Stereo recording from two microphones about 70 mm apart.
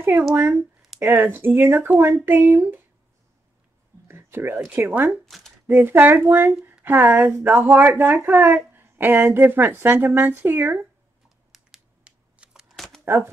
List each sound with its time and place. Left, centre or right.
0.4 s speech: right
4.1 s a sound: right
4.7 s speech: right
5.2 s shuffling cards: centre
5.7 s speech: right
11.5 s a sound: centre
12.0 s crushing: centre
12.6 s a sound: centre
13.0 s speech: right